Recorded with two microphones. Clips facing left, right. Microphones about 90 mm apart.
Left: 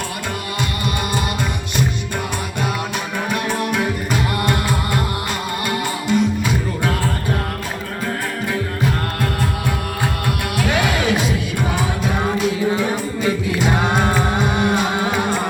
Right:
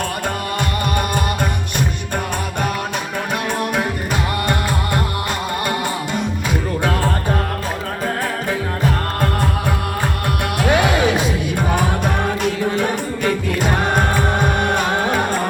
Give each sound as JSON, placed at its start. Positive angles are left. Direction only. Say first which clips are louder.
{"t": 3.7, "sound": "music", "louder": "even", "side_deg": -35}
{"t": 10.6, "sound": "music", "louder": "right 4 dB", "side_deg": -35}
{"t": 11.7, "sound": "music", "louder": "right 3 dB", "side_deg": -50}